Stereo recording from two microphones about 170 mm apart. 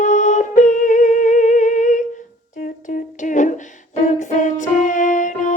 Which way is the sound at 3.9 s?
45° left (ahead or behind).